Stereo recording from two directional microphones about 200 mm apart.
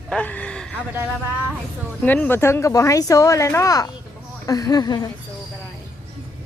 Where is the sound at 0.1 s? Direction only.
5° left (ahead or behind).